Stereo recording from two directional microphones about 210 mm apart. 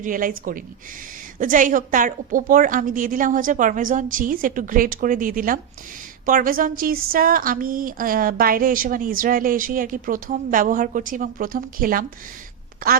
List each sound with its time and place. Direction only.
0.0 s a woman's voice: 40° right (ahead or behind)